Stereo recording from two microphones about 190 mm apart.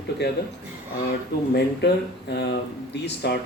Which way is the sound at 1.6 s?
60° left (ahead or behind).